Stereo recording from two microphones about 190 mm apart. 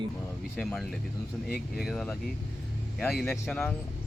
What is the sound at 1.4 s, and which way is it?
Speech, 50° left (ahead or behind).